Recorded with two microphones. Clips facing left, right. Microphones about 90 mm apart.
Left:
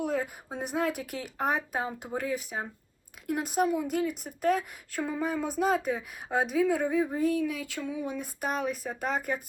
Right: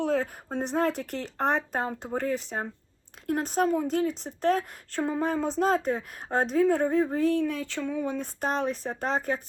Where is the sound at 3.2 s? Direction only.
40° right (ahead or behind).